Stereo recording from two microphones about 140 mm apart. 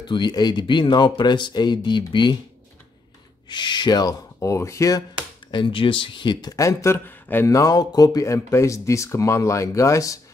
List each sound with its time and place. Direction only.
0.0 s speech: 35° left (ahead or behind)
3.4 s speech: 35° left (ahead or behind)
5.5 s speech: 35° left (ahead or behind)